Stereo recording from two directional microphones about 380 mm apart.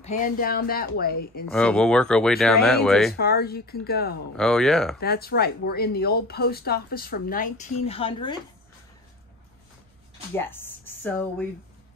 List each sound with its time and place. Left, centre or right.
0.0 s speech: left
1.5 s speech: centre
3.2 s speech: left
4.4 s speech: centre
5.0 s speech: left
10.3 s speech: centre